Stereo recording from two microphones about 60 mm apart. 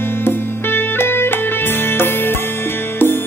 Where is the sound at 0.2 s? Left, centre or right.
Left.